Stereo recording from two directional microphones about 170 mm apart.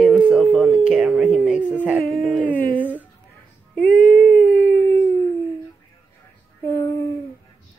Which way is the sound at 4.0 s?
55° left (ahead or behind).